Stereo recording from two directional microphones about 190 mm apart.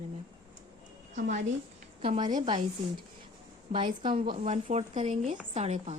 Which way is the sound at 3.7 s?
25° right (ahead or behind).